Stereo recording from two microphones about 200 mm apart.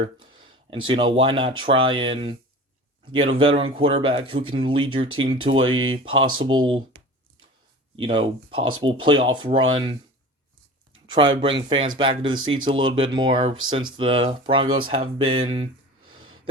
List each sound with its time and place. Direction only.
0.0 s speech: 25° right (ahead or behind)
6.2 s speech: 90° right
6.5 s speech: 25° right (ahead or behind)
7.9 s speech: 25° right (ahead or behind)
11.3 s speech: 25° right (ahead or behind)